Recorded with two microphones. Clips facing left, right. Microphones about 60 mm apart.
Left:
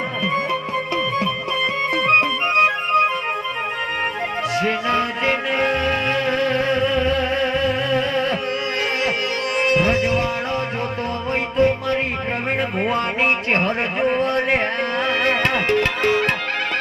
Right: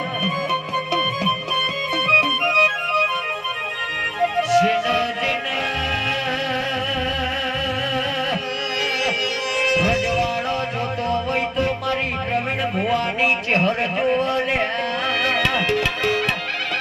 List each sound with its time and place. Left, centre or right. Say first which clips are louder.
2.0 s music: even; left
4.4 s music: right 5 dB; left
9.6 s music: left 2 dB; left
12.9 s a sound: even; left